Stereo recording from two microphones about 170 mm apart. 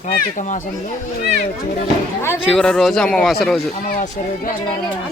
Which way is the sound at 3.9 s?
45° left (ahead or behind).